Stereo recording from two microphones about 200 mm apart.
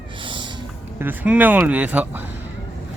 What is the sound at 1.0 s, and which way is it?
Speech, 5° right (ahead or behind).